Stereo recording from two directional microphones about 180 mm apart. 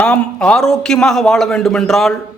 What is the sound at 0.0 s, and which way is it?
Speech, 5° left (ahead or behind).